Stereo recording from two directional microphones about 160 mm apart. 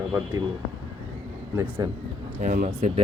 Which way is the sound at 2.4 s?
55° right (ahead or behind).